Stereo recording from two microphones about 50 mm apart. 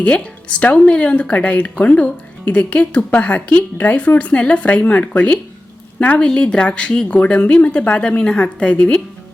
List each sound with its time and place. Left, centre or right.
0.0 s speech: left